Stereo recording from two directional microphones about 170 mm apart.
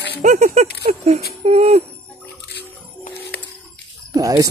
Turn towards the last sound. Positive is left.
turn(degrees=-20)  # may be behind; listen again after turning